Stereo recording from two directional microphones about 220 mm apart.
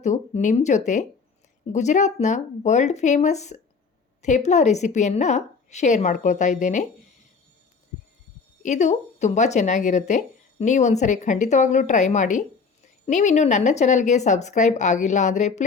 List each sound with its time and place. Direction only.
0.0 s speech: 35° left (ahead or behind)
8.6 s speech: 30° left (ahead or behind)